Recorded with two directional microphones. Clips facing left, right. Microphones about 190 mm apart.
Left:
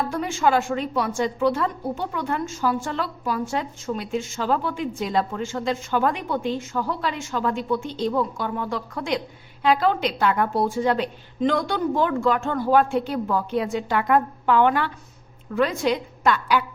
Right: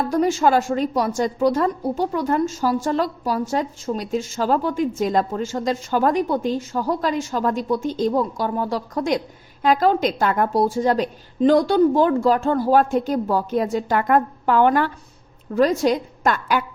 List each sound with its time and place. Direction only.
0.1 s a woman's voice: 40° right (ahead or behind)